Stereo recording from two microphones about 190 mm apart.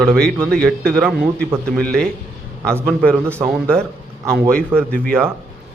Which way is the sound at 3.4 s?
5° right (ahead or behind).